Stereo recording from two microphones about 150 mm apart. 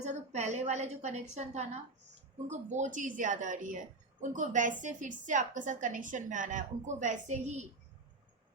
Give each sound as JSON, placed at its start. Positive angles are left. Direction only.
{"t": 0.0, "sound": "a woman's voice", "side_deg": -50}